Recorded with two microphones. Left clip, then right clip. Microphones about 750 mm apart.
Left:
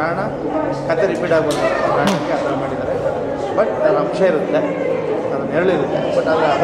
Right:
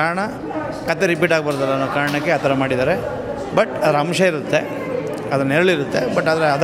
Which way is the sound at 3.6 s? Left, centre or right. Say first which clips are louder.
Left 1 dB; right.